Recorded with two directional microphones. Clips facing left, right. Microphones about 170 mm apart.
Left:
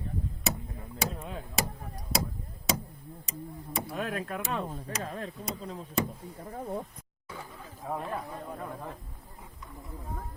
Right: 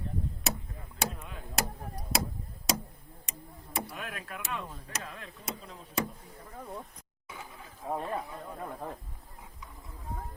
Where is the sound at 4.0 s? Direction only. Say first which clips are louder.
Left 8 dB; 35° left (ahead or behind).